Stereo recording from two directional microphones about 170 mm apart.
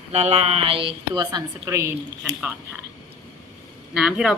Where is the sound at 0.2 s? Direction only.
40° right (ahead or behind); by 2.3 s 15° right (ahead or behind).